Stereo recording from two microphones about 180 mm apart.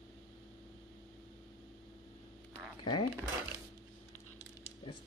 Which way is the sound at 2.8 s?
25° left (ahead or behind).